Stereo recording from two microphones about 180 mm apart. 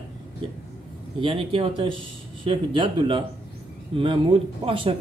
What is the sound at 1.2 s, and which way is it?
Speech, 30° right (ahead or behind).